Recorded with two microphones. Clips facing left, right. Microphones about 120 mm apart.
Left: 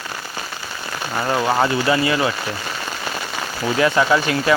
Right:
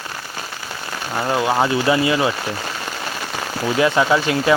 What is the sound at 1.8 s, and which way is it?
Speech, 20° right (ahead or behind).